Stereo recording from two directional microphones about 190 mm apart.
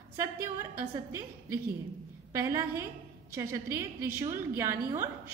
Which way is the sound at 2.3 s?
15° right (ahead or behind).